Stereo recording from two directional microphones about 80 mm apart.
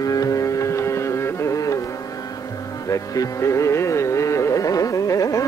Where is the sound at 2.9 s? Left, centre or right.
Left.